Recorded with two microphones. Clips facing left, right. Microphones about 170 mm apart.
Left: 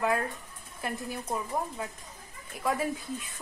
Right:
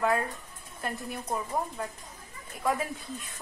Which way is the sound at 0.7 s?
Centre (ahead or behind).